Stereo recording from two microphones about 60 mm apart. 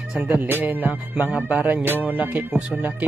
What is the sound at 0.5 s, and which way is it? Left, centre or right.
Speech, right.